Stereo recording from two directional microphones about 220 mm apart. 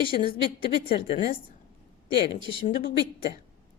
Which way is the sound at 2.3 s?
25° left (ahead or behind).